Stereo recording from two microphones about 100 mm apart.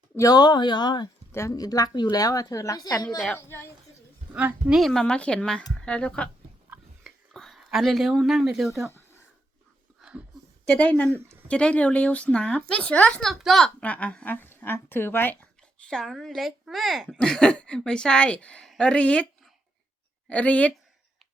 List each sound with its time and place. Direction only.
0.2 s speech: 40° left (ahead or behind)
1.3 s speech: 25° left (ahead or behind)
1.5 s a woman's voice: 40° left (ahead or behind)
3.3 s speech: 20° left (ahead or behind)
4.4 s speech: 10° right (ahead or behind); by 6.3 s 10° left (ahead or behind)
7.3 s speech: centre (ahead or behind)
10.0 s a sound: 10° right (ahead or behind)
10.7 s speech: 10° left (ahead or behind)
13.3 s speech: centre (ahead or behind)
13.8 s speech: 15° left (ahead or behind)
15.8 s speech: 5° left (ahead or behind)
20.2 s speech: 15° left (ahead or behind)